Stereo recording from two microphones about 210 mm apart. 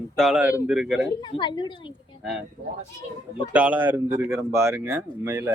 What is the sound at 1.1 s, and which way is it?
Speech, 20° left (ahead or behind).